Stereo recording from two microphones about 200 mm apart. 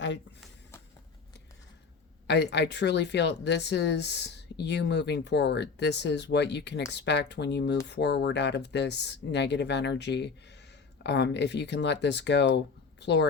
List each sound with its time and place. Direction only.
2.2 s speech: 60° left (ahead or behind)